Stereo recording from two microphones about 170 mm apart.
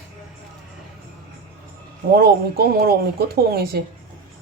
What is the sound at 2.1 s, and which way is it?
Speech, 65° right (ahead or behind).